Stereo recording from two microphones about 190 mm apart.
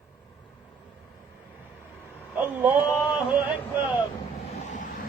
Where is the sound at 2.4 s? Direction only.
10° right (ahead or behind).